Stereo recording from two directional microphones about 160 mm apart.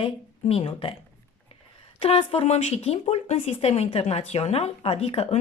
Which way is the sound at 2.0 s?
40° left (ahead or behind).